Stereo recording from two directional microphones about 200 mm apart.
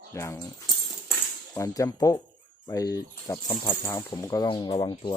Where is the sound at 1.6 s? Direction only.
15° left (ahead or behind).